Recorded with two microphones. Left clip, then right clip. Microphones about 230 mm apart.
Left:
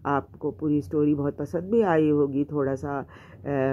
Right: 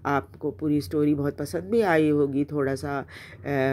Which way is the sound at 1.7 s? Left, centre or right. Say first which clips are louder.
Even; right.